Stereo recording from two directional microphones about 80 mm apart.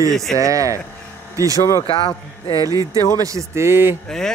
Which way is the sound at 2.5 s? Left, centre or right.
Right.